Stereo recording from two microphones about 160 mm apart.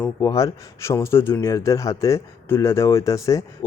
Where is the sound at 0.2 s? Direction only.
20° left (ahead or behind).